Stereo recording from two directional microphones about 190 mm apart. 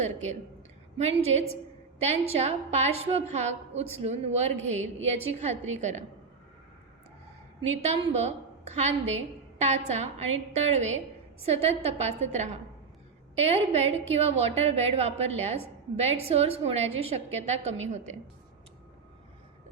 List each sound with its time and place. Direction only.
0.0 s a woman's voice: 35° right (ahead or behind)
7.8 s a woman's voice: 30° right (ahead or behind)